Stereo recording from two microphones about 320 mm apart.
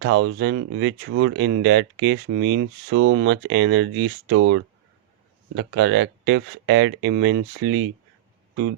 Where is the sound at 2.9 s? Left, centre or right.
Right.